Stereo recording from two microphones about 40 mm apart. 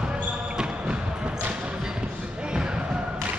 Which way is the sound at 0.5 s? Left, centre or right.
Right.